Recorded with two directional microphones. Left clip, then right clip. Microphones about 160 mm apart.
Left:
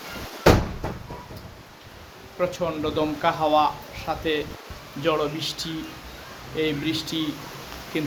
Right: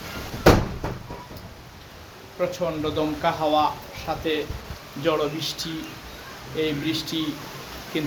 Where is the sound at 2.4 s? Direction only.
15° left (ahead or behind).